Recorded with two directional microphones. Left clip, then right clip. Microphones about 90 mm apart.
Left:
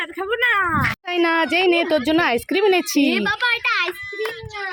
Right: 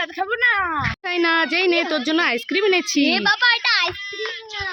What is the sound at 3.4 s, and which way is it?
Speech, 50° right (ahead or behind).